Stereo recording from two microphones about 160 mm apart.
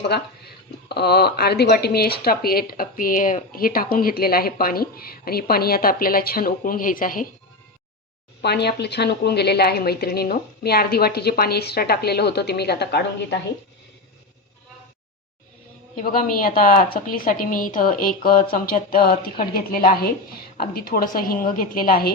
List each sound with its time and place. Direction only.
0.1 s speech: 90° left; by 7.3 s 60° left (ahead or behind)
8.4 s a woman's voice: 90° left
16.0 s a woman's voice: 60° left (ahead or behind)